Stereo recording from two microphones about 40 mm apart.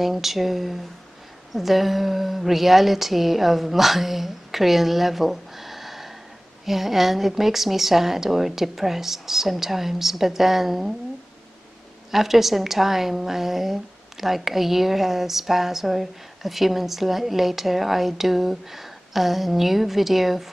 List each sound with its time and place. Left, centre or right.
0.0 s a woman's voice: centre
12.1 s a woman's voice: centre